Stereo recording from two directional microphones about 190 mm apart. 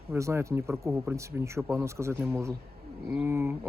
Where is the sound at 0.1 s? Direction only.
15° right (ahead or behind).